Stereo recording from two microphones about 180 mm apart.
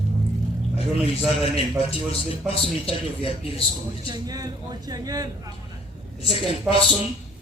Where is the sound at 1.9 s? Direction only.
30° left (ahead or behind).